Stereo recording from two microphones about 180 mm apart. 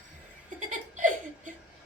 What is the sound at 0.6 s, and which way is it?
Laughter, 45° right (ahead or behind).